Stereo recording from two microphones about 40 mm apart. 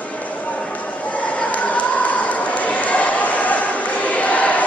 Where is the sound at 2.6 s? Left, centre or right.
Left.